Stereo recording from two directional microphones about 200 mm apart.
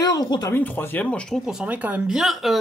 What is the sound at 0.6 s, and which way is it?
Speech, 10° left (ahead or behind).